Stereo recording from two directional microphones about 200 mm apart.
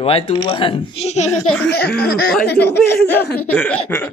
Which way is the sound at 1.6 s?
55° left (ahead or behind).